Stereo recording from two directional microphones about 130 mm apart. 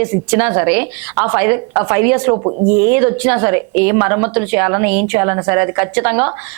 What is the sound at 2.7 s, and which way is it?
A woman's voice, 20° right (ahead or behind).